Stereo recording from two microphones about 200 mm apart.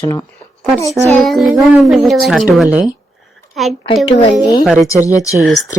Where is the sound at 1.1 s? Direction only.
Centre (ahead or behind).